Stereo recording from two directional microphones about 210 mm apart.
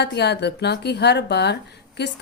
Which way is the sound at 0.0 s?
50° left (ahead or behind).